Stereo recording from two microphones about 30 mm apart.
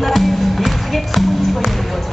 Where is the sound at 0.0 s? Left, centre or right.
Centre.